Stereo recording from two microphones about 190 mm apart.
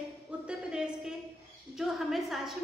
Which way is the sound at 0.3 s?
5° right (ahead or behind).